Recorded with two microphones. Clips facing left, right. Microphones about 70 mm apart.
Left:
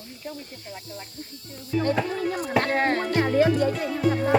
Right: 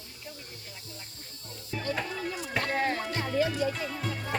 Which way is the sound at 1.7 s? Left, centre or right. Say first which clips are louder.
Left 12 dB; centre.